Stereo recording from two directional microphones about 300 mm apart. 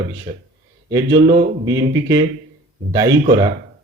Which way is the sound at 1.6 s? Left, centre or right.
Centre.